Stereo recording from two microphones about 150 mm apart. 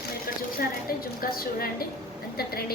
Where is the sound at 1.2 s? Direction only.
80° left.